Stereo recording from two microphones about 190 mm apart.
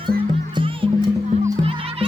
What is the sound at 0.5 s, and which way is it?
Music, 25° right (ahead or behind).